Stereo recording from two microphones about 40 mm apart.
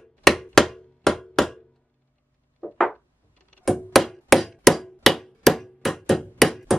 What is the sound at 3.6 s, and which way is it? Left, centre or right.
Hammer, centre.